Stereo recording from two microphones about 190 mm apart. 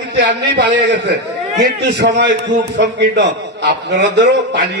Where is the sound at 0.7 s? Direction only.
75° right (ahead or behind).